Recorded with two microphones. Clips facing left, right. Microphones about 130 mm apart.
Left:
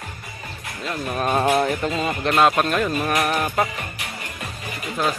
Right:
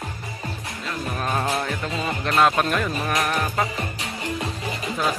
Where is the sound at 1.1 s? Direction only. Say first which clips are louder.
Left 6 dB; 15° left (ahead or behind).